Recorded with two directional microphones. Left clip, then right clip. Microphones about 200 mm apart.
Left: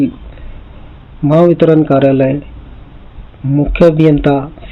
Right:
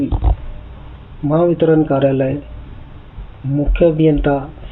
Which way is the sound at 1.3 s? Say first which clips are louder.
Left 5 dB; 65° left (ahead or behind).